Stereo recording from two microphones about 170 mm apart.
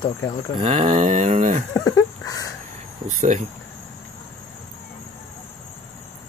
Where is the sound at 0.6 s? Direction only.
35° right (ahead or behind).